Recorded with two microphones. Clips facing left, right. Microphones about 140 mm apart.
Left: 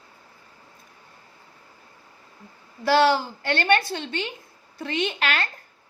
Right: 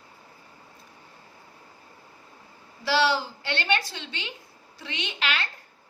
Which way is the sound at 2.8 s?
50° left (ahead or behind).